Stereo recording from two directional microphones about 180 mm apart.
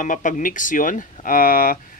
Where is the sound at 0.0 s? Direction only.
45° left (ahead or behind).